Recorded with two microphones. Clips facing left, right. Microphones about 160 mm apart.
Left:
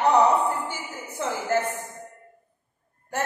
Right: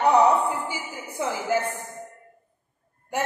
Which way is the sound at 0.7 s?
10° right (ahead or behind).